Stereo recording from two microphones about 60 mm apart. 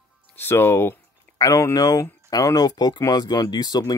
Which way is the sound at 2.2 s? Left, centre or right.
Left.